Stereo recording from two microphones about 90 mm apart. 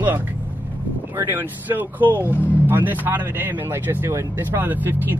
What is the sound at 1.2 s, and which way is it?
Speech, 20° right (ahead or behind).